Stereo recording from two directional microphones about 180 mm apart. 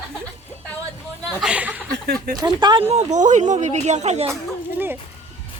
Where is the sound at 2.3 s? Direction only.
25° right (ahead or behind).